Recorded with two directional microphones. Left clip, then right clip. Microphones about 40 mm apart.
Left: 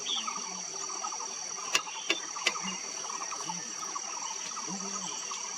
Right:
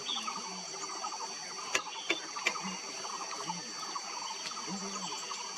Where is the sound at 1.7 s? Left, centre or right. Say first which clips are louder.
Left 3 dB; left.